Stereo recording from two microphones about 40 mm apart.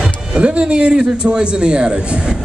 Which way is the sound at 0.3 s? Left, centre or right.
Right.